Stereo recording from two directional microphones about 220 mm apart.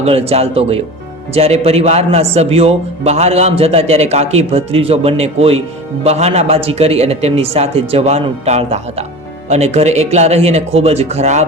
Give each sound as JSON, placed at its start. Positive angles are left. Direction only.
{"t": 0.0, "sound": "a man's voice", "side_deg": -25}